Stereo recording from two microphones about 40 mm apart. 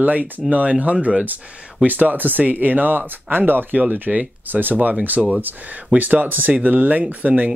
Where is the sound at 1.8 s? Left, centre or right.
Right.